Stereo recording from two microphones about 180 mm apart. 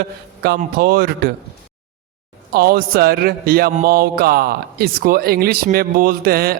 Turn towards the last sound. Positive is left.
turn(degrees=-60)  # may be behind; listen again after turning